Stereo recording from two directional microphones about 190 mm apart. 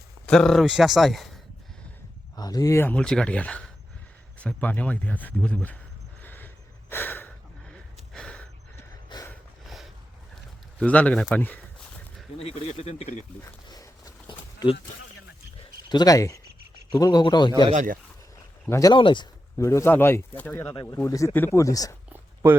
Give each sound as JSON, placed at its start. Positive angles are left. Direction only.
{"t": 0.3, "sound": "speech", "side_deg": 0}
{"t": 2.3, "sound": "speech", "side_deg": 20}
{"t": 6.2, "sound": "a sound", "side_deg": 10}
{"t": 8.1, "sound": "gasp", "side_deg": 5}
{"t": 9.0, "sound": "a sound", "side_deg": 20}
{"t": 9.6, "sound": "a sound", "side_deg": 0}
{"t": 10.8, "sound": "speech", "side_deg": 5}
{"t": 12.4, "sound": "speech", "side_deg": 30}
{"t": 13.7, "sound": "a sound", "side_deg": 20}
{"t": 16.9, "sound": "speech", "side_deg": 20}
{"t": 17.7, "sound": "speech", "side_deg": -45}
{"t": 18.6, "sound": "speech", "side_deg": 15}
{"t": 20.7, "sound": "speech", "side_deg": 20}